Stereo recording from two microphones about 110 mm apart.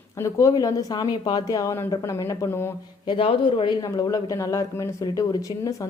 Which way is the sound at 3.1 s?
50° left (ahead or behind).